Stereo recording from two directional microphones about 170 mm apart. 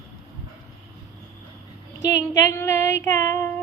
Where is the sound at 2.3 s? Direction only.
20° left (ahead or behind).